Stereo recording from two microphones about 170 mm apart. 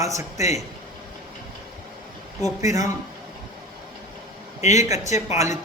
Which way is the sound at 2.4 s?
20° right (ahead or behind).